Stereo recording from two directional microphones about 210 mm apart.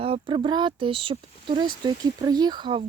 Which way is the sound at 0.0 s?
25° right (ahead or behind).